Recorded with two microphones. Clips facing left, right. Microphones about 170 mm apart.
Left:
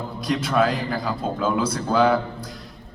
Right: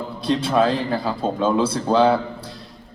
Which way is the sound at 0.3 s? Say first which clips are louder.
Right 3 dB; 30° right (ahead or behind).